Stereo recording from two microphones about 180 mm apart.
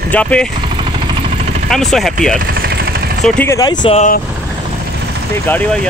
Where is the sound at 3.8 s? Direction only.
35° left (ahead or behind).